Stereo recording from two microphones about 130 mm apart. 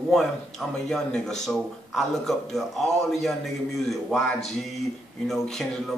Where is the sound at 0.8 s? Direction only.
5° left (ahead or behind).